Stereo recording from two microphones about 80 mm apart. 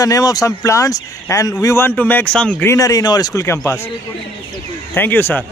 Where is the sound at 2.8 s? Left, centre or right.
Left.